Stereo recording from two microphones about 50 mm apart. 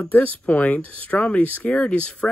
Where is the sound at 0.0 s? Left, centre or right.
Left.